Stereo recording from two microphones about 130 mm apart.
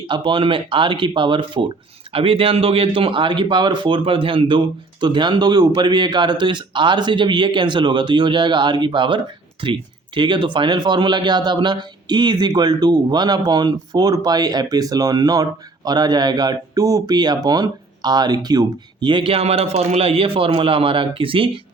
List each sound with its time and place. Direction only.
0.1 s a man's voice: 40° right (ahead or behind)